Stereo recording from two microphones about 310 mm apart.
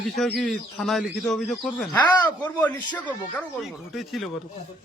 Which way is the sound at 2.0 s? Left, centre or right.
Centre.